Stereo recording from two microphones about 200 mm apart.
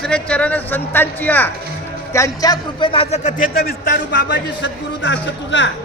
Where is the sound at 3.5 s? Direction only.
50° left (ahead or behind); by 5.6 s 65° left (ahead or behind).